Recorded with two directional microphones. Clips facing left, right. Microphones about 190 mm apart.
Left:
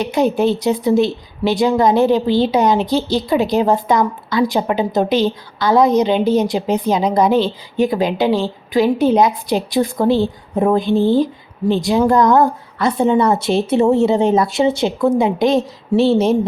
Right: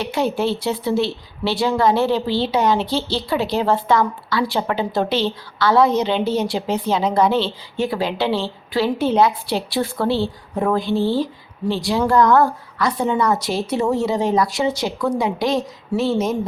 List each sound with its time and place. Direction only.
0.0 s a woman's voice: 15° left (ahead or behind)